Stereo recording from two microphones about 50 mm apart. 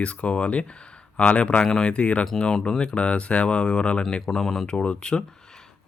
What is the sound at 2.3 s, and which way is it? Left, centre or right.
Speech, centre.